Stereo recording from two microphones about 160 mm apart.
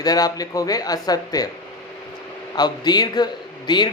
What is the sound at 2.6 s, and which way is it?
Speech, 25° left (ahead or behind).